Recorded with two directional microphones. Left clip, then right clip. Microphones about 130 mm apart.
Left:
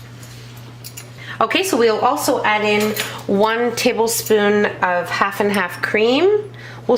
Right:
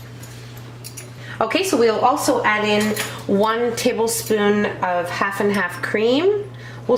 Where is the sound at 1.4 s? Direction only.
35° left (ahead or behind).